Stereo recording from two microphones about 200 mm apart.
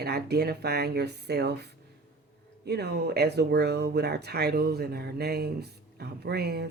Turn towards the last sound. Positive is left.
turn(degrees=-55)  # may be behind; listen again after turning